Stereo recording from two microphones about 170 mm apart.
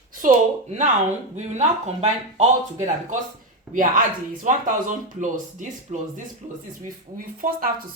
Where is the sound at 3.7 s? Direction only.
50° right (ahead or behind).